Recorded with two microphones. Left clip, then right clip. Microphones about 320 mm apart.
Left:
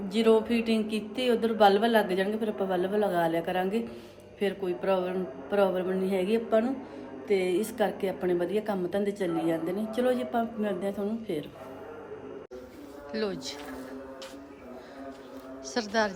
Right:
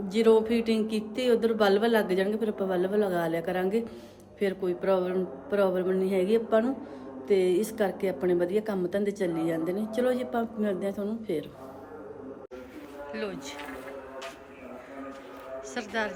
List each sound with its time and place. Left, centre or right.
0.1 s a woman's voice: centre
13.1 s speech: centre
15.7 s a woman's voice: centre